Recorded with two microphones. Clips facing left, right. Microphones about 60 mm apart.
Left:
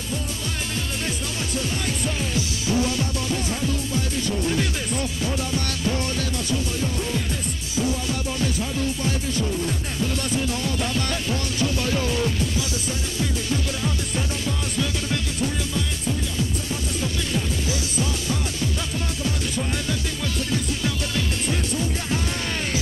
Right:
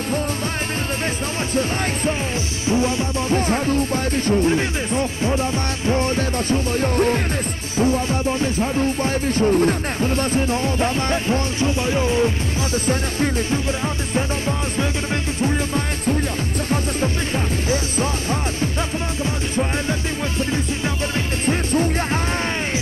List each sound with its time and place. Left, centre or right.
1.5 s speech: right
12.7 s speech: right
15.4 s music: right
19.5 s music: right